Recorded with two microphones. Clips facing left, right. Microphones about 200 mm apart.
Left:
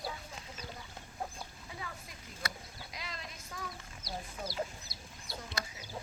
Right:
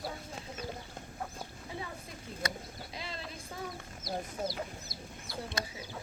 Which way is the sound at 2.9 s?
30° right (ahead or behind).